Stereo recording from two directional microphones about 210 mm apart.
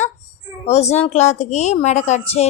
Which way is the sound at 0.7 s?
30° left (ahead or behind).